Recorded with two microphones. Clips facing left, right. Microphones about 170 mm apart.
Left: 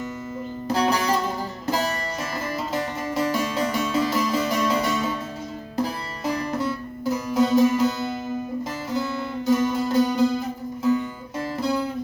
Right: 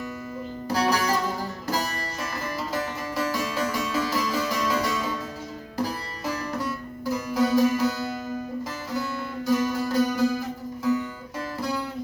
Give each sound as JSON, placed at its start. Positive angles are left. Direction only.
{"t": 0.7, "sound": "music", "side_deg": 25}
{"t": 2.7, "sound": "music", "side_deg": 25}
{"t": 9.5, "sound": "music", "side_deg": 25}